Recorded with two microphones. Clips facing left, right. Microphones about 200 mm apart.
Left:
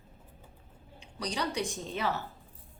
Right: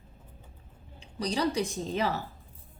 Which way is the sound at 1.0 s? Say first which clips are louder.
Right 5 dB; 35° right (ahead or behind).